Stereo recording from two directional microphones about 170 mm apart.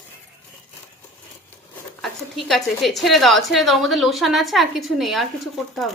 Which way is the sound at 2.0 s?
Centre (ahead or behind).